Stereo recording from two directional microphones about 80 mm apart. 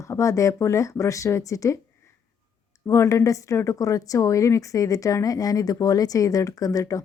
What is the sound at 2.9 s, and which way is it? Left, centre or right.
A woman's voice, left.